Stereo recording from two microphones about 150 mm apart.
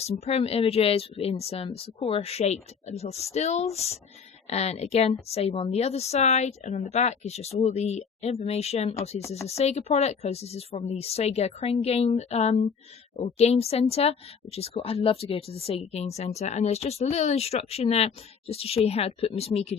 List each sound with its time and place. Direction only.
0.0 s a woman's voice: 45° left (ahead or behind)